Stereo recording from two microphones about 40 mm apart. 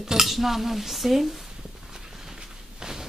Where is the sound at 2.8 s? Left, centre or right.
Centre.